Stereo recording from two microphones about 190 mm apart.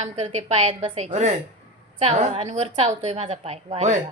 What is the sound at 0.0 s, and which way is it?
Speech, 30° right (ahead or behind).